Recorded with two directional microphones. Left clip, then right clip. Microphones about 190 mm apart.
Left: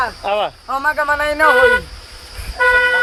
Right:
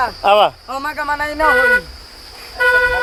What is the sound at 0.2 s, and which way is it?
Speech, 40° right (ahead or behind).